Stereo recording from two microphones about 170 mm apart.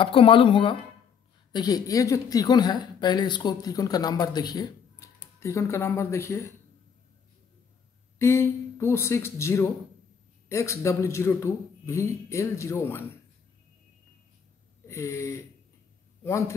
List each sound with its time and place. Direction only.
0.0 s a woman's voice: 30° left (ahead or behind)
8.2 s a man's voice: 15° left (ahead or behind)
14.9 s a sound: 15° left (ahead or behind)
16.3 s a man's voice: 20° left (ahead or behind)